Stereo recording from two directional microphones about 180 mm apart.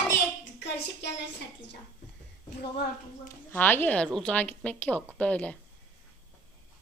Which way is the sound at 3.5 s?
10° left (ahead or behind).